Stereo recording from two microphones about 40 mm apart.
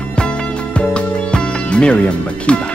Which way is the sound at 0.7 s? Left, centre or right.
Left.